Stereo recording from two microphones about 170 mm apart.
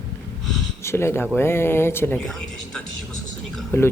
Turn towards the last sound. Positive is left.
turn(degrees=15)  # may be behind; listen again after turning